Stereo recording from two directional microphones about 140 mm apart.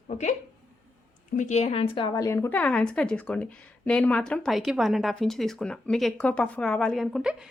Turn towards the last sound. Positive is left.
turn(degrees=0)  # may be behind; listen again after turning